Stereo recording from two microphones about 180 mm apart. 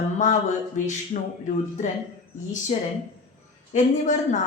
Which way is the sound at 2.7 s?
35° left (ahead or behind).